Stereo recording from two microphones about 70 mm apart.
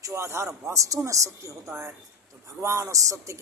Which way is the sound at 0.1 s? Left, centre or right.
Right.